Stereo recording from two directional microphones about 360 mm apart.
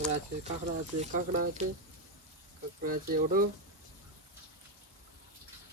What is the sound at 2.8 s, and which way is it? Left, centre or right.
Speech, right.